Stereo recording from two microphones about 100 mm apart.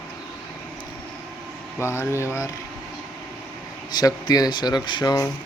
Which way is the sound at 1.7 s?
25° left (ahead or behind).